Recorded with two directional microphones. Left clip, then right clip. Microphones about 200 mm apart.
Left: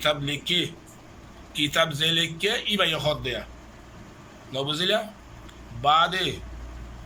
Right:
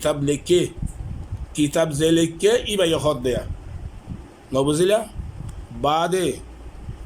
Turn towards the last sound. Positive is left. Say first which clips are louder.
# right 1 dB
turn(degrees=-45)  # may be behind; listen again after turning